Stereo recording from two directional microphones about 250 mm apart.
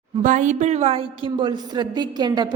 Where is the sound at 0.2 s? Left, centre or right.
Right.